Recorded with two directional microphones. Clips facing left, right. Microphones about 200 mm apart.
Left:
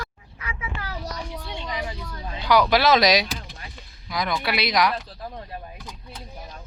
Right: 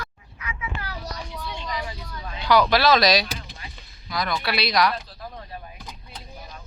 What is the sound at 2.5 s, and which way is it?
Speech, 10° left (ahead or behind).